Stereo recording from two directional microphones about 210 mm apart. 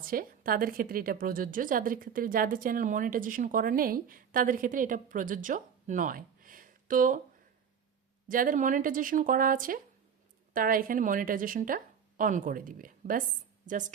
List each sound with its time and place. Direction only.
0.0 s a woman's voice: 45° right (ahead or behind)
8.3 s a woman's voice: 40° right (ahead or behind)